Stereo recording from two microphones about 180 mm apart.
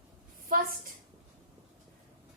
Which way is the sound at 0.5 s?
50° right (ahead or behind).